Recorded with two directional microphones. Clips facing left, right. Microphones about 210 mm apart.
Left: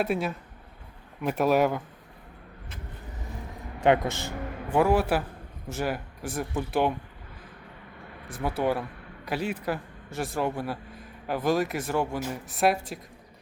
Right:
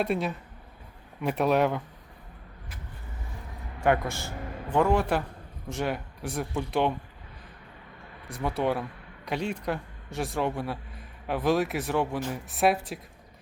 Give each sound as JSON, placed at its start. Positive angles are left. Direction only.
{"t": 0.0, "sound": "speech", "side_deg": 0}
{"t": 3.8, "sound": "a man's voice", "side_deg": 20}
{"t": 4.7, "sound": "a man's voice", "side_deg": 5}
{"t": 8.3, "sound": "speech", "side_deg": 0}